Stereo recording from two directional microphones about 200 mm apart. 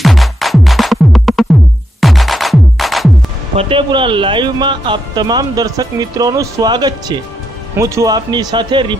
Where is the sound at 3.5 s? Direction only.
30° right (ahead or behind).